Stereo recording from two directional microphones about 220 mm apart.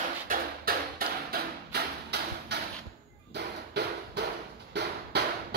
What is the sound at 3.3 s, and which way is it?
Drum, 50° right (ahead or behind).